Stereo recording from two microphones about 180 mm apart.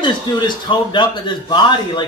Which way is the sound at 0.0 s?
25° left (ahead or behind).